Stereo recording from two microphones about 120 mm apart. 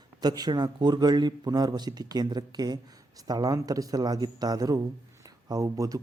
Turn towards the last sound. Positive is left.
turn(degrees=-30)  # may be behind; listen again after turning